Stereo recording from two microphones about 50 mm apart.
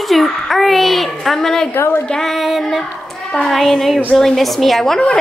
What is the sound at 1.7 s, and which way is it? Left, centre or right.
Speech, left.